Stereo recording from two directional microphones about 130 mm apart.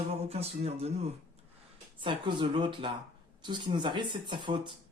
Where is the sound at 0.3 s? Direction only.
50° right (ahead or behind).